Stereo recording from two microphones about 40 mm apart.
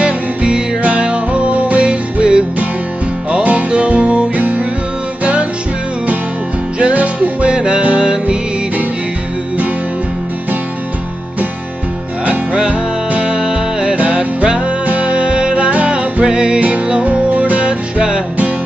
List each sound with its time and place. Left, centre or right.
0.0 s music: right
3.4 s music: right
6.8 s music: right
13.3 s music: centre
13.9 s music: right